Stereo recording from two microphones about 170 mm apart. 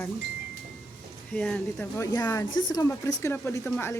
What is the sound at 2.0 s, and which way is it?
Speech, 20° left (ahead or behind).